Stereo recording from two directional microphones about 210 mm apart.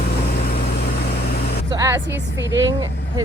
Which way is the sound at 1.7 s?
15° right (ahead or behind).